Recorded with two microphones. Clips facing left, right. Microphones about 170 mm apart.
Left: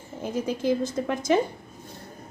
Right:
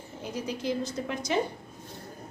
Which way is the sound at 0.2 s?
50° left (ahead or behind).